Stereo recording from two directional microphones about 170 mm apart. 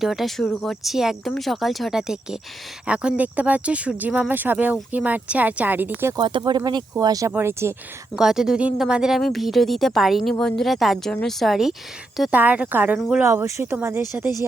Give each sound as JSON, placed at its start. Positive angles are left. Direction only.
{"t": 0.0, "sound": "speech", "side_deg": 0}
{"t": 6.1, "sound": "speech", "side_deg": -25}
{"t": 8.2, "sound": "speech", "side_deg": -5}